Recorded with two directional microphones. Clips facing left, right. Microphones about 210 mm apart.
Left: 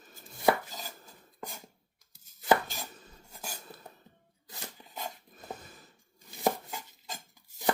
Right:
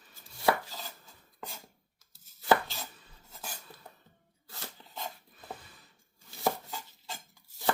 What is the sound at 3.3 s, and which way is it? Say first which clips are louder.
Cutlery: left 1 dB; 10° left (ahead or behind).